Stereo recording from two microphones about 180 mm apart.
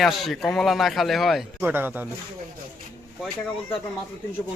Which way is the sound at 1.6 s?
10° right (ahead or behind).